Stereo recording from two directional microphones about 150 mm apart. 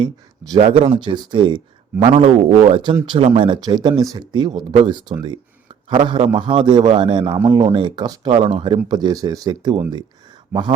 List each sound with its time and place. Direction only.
0.0 s speech: 25° right (ahead or behind)
0.6 s speech: 40° right (ahead or behind)